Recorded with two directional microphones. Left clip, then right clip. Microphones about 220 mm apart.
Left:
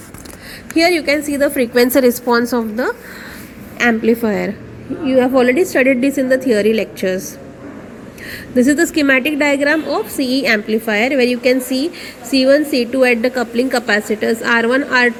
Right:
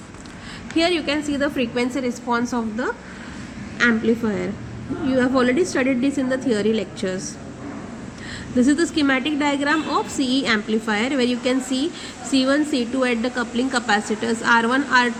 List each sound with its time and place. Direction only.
0.8 s a woman's voice: 20° left (ahead or behind)
4.2 s a woman's voice: 30° left (ahead or behind)
5.1 s a woman's voice: 15° left (ahead or behind)
8.5 s a woman's voice: 20° left (ahead or behind)